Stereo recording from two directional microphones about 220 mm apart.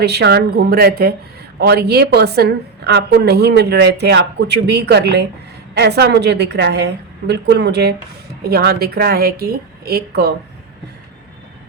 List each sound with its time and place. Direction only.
0.0 s a woman's voice: 50° right (ahead or behind)